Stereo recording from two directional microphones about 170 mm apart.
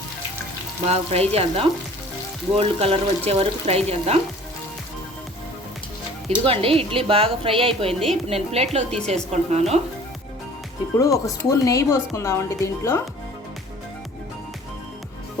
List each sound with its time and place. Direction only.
0.9 s speech: 40° right (ahead or behind)
6.2 s speech: 35° right (ahead or behind)
10.9 s speech: 20° left (ahead or behind)